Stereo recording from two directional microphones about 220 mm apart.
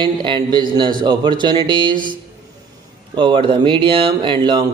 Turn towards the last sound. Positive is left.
turn(degrees=-20)  # may be behind; listen again after turning